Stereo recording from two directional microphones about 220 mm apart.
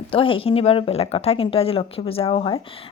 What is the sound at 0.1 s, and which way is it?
Speech, 25° left (ahead or behind).